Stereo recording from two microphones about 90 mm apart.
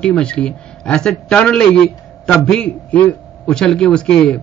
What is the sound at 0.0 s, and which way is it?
A man's voice, 10° left (ahead or behind).